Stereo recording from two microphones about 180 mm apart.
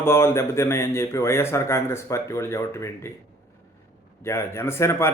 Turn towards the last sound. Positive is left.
turn(degrees=15)  # may be behind; listen again after turning